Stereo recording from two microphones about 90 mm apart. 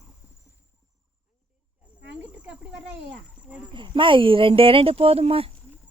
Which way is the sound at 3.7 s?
65° right (ahead or behind).